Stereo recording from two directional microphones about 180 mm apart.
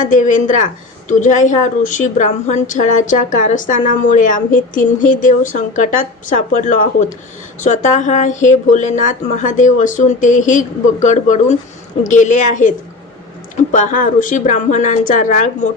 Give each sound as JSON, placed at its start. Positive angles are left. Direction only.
{"t": 0.0, "sound": "a woman's voice", "side_deg": 45}
{"t": 13.7, "sound": "a woman's voice", "side_deg": 45}